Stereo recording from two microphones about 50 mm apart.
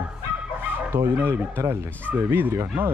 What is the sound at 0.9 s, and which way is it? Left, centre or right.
Speech, right.